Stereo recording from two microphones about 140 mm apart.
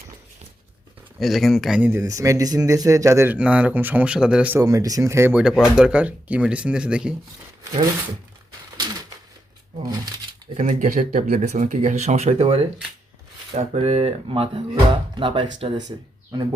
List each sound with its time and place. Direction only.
1.2 s speech: centre (ahead or behind)
1.8 s speech: 20° right (ahead or behind)
3.3 s speech: 10° right (ahead or behind)
4.5 s speech: 25° right (ahead or behind)
5.4 s speech: 5° right (ahead or behind)
10.6 s speech: 60° right (ahead or behind); by 15.8 s 40° right (ahead or behind)